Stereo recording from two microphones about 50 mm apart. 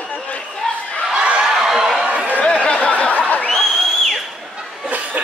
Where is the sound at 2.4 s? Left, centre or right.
Left.